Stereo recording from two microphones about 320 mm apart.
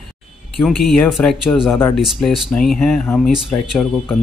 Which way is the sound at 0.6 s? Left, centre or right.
Centre.